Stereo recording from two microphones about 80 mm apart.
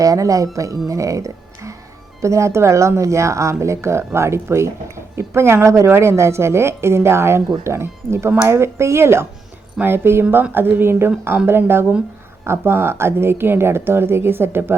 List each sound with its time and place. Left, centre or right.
0.0 s speech: right